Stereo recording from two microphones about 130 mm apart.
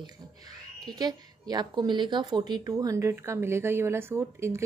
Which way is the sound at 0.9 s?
30° right (ahead or behind).